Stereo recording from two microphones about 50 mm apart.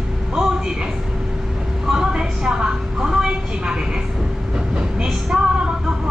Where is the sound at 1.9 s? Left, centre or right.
Centre.